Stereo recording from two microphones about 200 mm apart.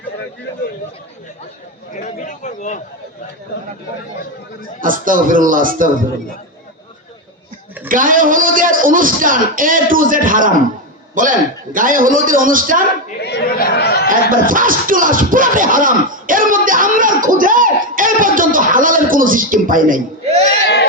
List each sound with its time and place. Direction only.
1.9 s speech: 40° left (ahead or behind)
4.8 s speech: 45° right (ahead or behind)
7.9 s speech: 45° right (ahead or behind)
13.2 s chatter: 55° left (ahead or behind)
14.1 s speech: 45° right (ahead or behind)